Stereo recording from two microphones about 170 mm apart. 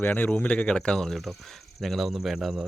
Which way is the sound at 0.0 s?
10° left (ahead or behind).